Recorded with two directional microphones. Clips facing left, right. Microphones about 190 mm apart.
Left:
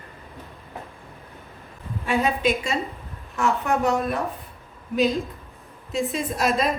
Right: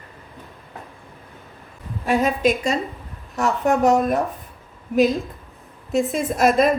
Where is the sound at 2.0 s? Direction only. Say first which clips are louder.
Right 4 dB; 40° right (ahead or behind).